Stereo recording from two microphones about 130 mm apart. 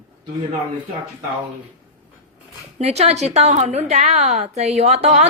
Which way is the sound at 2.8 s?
55° right (ahead or behind).